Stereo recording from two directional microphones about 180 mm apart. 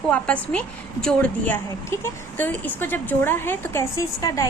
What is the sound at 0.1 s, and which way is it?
A woman's voice, 5° left (ahead or behind).